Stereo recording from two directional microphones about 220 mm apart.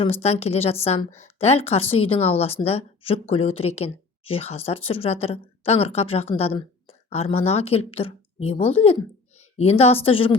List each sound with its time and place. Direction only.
0.0 s speech: 30° left (ahead or behind)